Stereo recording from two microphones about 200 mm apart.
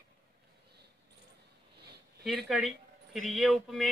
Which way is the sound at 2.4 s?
Centre (ahead or behind).